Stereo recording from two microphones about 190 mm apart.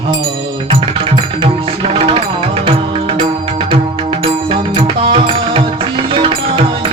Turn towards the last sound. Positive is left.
turn(degrees=-25)  # may be behind; listen again after turning